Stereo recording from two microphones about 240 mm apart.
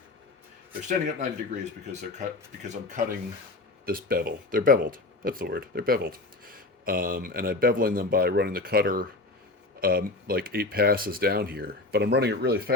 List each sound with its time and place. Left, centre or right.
0.9 s speech: right